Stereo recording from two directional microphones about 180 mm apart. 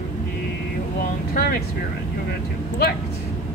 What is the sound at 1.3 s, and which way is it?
Speech, 55° left (ahead or behind).